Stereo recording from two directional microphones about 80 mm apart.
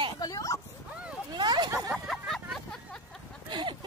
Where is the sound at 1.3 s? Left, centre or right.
Right.